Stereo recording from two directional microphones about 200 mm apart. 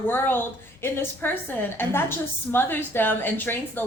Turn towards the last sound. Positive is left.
turn(degrees=10)  # may be behind; listen again after turning